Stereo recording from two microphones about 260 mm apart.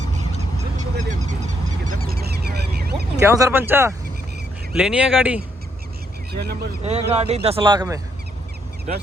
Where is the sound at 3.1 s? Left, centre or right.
Centre.